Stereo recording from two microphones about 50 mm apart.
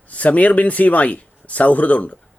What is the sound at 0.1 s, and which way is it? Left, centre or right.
Speech, left.